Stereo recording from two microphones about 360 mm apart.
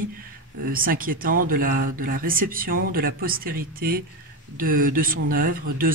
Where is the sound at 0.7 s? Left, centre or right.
Right.